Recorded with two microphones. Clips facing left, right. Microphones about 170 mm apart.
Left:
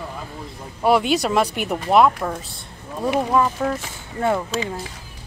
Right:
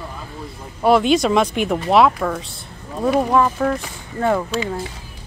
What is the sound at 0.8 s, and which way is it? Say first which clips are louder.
Speech: right 3 dB; 10° left (ahead or behind).